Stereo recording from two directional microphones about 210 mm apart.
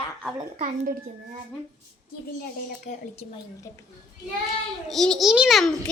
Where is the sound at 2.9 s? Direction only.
30° left (ahead or behind).